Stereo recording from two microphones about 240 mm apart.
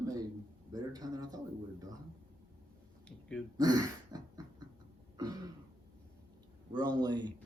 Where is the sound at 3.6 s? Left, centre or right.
Centre.